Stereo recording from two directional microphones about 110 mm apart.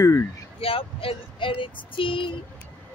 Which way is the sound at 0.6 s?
55° left (ahead or behind).